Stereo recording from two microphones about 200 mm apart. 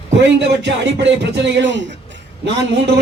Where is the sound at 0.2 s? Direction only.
60° right (ahead or behind).